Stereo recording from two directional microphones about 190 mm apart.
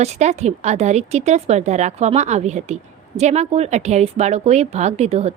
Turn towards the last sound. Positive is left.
turn(degrees=-35)  # may be behind; listen again after turning